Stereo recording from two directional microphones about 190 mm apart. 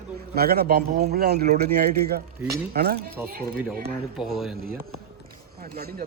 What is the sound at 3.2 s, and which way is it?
Speech, 10° right (ahead or behind).